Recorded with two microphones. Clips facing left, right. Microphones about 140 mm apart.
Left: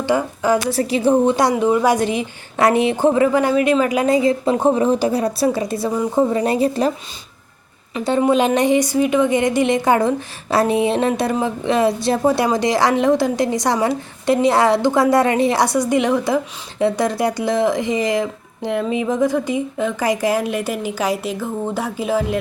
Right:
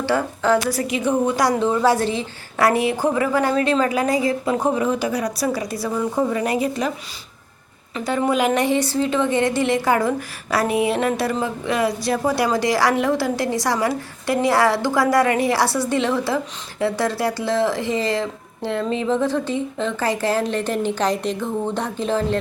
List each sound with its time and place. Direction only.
0.0 s a woman's voice: 15° left (ahead or behind)
0.7 s a woman's voice: 30° left (ahead or behind)
1.5 s a woman's voice: 15° left (ahead or behind)
6.3 s a woman's voice: 30° left (ahead or behind)
7.9 s a woman's voice: 20° left (ahead or behind)